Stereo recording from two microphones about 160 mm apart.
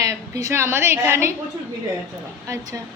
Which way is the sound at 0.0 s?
20° right (ahead or behind).